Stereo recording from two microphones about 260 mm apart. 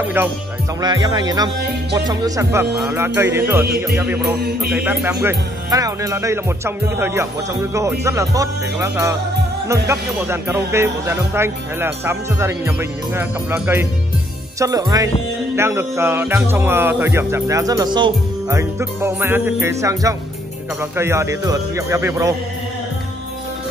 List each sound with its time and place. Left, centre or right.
0.0 s speech: centre
4.4 s music: right
4.7 s speech: centre